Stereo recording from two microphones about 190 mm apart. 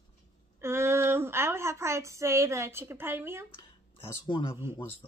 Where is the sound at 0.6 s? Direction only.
15° right (ahead or behind).